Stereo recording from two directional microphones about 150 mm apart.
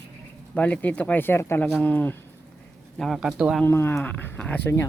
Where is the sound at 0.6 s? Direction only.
10° left (ahead or behind).